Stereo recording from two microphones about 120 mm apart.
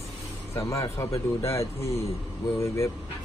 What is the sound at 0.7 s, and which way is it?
Speech, 25° left (ahead or behind).